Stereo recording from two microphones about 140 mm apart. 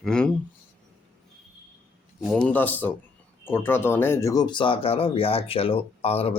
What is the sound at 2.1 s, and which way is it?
A man's voice, 5° left (ahead or behind).